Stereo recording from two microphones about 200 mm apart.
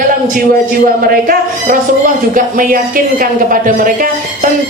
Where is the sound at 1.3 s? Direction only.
45° right (ahead or behind).